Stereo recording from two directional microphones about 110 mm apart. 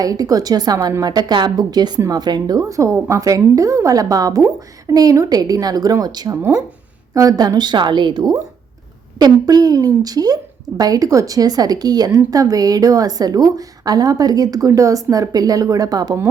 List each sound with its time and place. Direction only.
0.0 s a woman's voice: 35° right (ahead or behind)
6.3 s speech: 20° right (ahead or behind)
7.1 s a woman's voice: 35° right (ahead or behind)